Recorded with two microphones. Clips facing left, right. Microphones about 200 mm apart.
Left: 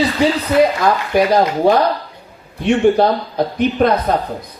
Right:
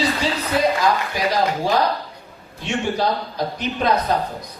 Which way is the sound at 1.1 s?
60° left (ahead or behind).